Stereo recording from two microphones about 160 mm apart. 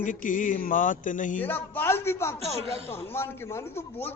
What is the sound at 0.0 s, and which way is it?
Mantra, 55° left (ahead or behind).